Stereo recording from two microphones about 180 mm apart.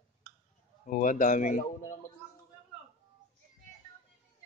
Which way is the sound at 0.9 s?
45° left (ahead or behind).